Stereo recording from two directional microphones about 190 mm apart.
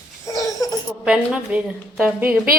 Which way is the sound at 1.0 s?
5° right (ahead or behind).